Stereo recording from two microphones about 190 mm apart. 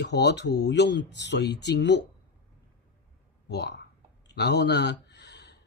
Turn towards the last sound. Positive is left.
turn(degrees=65)  # may be behind; listen again after turning